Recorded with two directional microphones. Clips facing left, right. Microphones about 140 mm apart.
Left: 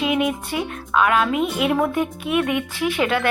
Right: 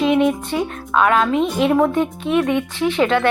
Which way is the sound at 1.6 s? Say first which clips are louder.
Right 6 dB; 35° right (ahead or behind).